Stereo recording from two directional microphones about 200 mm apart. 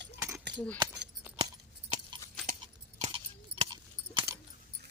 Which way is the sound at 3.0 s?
25° right (ahead or behind).